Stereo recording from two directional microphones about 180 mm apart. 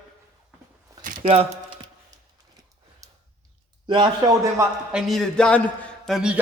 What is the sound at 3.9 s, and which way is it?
Speech, 25° right (ahead or behind).